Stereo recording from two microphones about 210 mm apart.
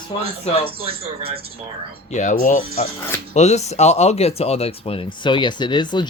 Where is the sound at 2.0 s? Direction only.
35° left (ahead or behind).